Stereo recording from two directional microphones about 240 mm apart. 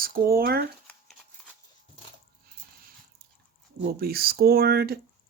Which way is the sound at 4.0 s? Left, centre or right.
Right.